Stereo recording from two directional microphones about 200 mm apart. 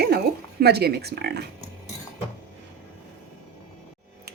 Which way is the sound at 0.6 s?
55° right (ahead or behind).